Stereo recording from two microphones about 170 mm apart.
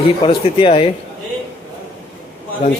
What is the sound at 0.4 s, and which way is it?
Speech, 35° left (ahead or behind).